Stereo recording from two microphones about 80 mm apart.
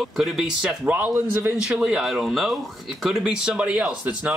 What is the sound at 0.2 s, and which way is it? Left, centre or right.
Speech, centre.